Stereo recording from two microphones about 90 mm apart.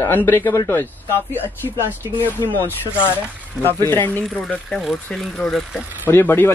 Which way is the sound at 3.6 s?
25° left (ahead or behind).